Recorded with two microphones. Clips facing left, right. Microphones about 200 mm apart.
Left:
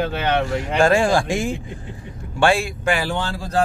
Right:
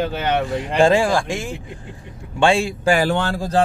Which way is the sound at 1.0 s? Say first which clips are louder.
Left 1 dB; centre (ahead or behind).